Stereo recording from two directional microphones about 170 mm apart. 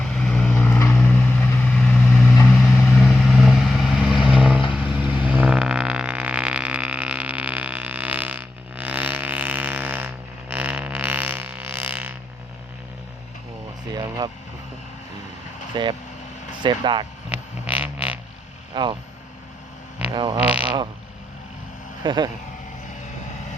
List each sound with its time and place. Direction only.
0.0 s vehicle: 5° left (ahead or behind)
2.2 s vehicle: 15° left (ahead or behind)
2.5 s vehicle: 5° left (ahead or behind)
10.5 s burping: 10° right (ahead or behind)
13.9 s vehicle: 25° right (ahead or behind)
15.7 s vehicle: 25° right (ahead or behind)
16.6 s a sound: 25° right (ahead or behind)
17.2 s a sound: 10° right (ahead or behind)
18.7 s vehicle: 25° right (ahead or behind)
22.0 s a sound: 25° right (ahead or behind)